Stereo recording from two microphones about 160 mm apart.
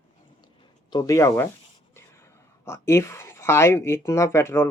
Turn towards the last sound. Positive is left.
turn(degrees=15)  # may be behind; listen again after turning